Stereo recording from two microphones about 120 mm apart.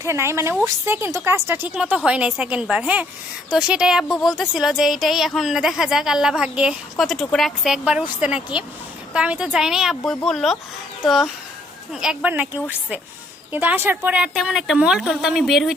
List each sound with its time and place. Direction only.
0.0 s a woman's voice: 20° right (ahead or behind)
14.3 s a woman's voice: centre (ahead or behind)